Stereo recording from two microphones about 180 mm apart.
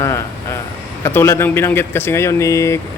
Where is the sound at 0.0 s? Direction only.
15° left (ahead or behind).